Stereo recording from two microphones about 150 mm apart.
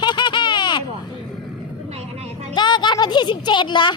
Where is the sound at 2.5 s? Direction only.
30° left (ahead or behind).